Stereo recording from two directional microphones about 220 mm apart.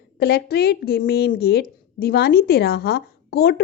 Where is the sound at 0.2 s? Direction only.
45° left (ahead or behind).